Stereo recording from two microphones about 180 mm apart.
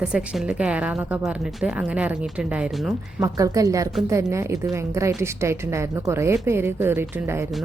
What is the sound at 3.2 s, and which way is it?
A woman's voice, 20° right (ahead or behind).